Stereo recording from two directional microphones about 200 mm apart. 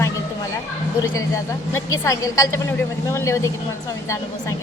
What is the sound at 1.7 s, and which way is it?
A woman's voice, 15° left (ahead or behind).